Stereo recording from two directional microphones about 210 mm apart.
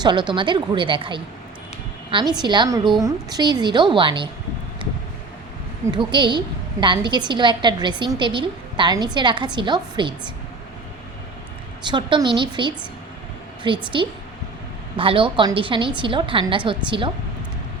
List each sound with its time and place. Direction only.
0.0 s a woman's voice: 20° right (ahead or behind)
5.9 s a woman's voice: 20° right (ahead or behind)
11.9 s a woman's voice: 20° right (ahead or behind)
14.9 s a woman's voice: 25° right (ahead or behind)